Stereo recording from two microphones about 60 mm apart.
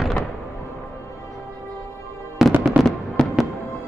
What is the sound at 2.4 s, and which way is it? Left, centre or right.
Fireworks, centre.